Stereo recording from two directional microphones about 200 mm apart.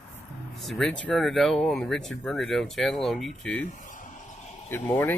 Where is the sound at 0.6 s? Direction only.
Centre (ahead or behind).